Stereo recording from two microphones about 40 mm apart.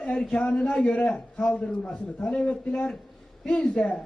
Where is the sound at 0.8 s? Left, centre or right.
Left.